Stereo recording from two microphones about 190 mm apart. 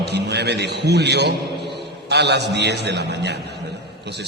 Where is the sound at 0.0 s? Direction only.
60° right (ahead or behind).